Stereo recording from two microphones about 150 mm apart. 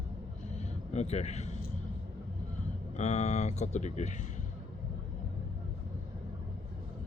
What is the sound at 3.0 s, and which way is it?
Speech, 50° left (ahead or behind).